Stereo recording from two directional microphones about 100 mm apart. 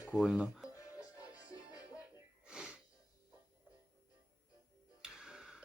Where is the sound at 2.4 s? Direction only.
10° right (ahead or behind).